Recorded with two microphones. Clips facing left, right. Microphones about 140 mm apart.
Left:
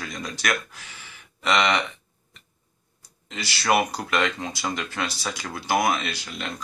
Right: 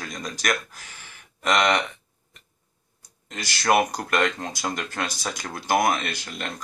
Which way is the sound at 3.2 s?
45° right (ahead or behind).